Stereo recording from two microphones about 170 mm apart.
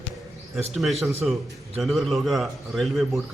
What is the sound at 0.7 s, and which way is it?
A man's voice, centre (ahead or behind).